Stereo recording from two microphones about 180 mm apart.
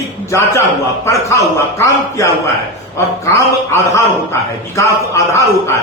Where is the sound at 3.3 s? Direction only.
15° left (ahead or behind).